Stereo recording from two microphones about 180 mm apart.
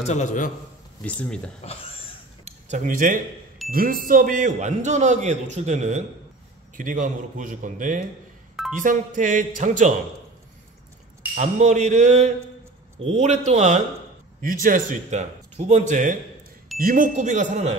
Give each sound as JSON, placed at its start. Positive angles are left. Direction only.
{"t": 0.0, "sound": "a man's voice", "side_deg": 40}
{"t": 1.0, "sound": "speech", "side_deg": 5}
{"t": 1.6, "sound": "a sound", "side_deg": 35}
{"t": 2.4, "sound": "keys jangling", "side_deg": -45}
{"t": 3.7, "sound": "a man's voice", "side_deg": -50}
{"t": 11.3, "sound": "a man's voice", "side_deg": -40}